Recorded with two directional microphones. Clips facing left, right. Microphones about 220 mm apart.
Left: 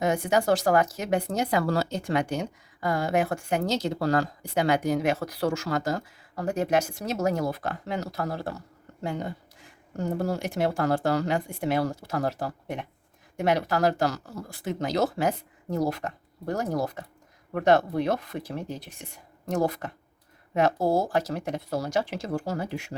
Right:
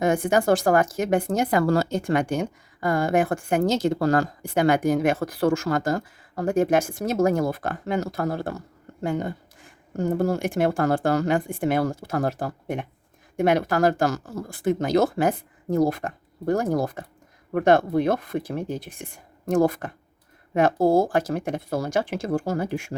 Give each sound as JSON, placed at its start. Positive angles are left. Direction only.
{"t": 0.0, "sound": "speech", "side_deg": -50}